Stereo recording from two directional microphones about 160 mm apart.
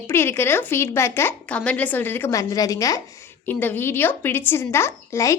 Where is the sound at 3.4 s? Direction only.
10° left (ahead or behind).